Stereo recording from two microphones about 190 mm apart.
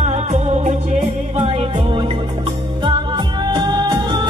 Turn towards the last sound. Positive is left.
turn(degrees=-25)  # may be behind; listen again after turning